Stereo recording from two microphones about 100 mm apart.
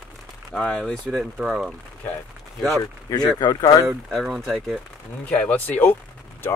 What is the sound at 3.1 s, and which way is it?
Speech, 40° left (ahead or behind).